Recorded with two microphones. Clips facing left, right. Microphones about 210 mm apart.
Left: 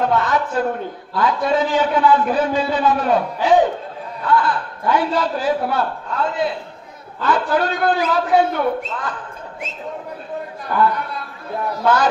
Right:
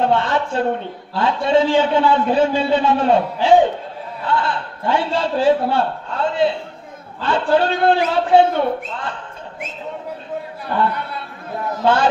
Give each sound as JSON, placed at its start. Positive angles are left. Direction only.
{"t": 0.0, "sound": "a man's voice", "side_deg": -25}
{"t": 11.8, "sound": "a man's voice", "side_deg": -25}